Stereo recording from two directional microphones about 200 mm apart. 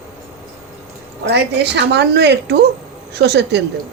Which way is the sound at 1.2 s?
60° right (ahead or behind).